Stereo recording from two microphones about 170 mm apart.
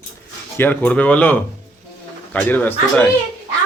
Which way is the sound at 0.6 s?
10° left (ahead or behind).